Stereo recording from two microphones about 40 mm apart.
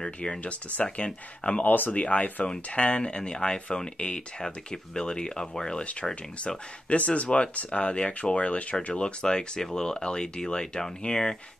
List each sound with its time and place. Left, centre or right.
0.0 s speech: left
0.4 s speech: left
1.6 s speech: left
2.0 s speech: left; by 5.9 s centre
6.9 s speech: left; by 11.3 s centre